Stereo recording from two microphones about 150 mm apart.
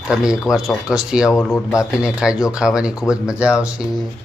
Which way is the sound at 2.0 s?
5° right (ahead or behind).